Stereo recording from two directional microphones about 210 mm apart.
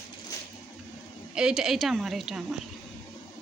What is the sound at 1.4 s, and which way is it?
A woman's voice, 5° right (ahead or behind).